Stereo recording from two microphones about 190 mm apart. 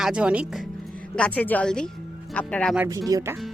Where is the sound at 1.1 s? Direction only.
5° left (ahead or behind).